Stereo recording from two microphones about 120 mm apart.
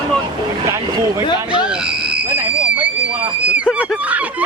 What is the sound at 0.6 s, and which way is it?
Speech, 25° right (ahead or behind).